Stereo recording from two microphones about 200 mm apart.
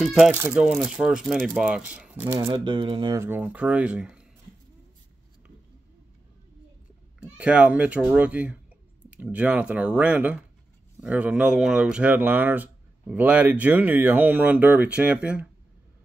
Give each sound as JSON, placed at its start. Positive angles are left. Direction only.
{"t": 0.0, "sound": "speech", "side_deg": 0}
{"t": 0.3, "sound": "speech", "side_deg": -10}
{"t": 2.3, "sound": "speech", "side_deg": -25}
{"t": 3.2, "sound": "speech", "side_deg": -10}
{"t": 7.2, "sound": "speech", "side_deg": -5}